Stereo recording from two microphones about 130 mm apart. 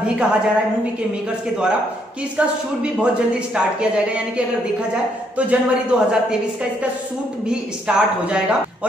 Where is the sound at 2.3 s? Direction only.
10° right (ahead or behind).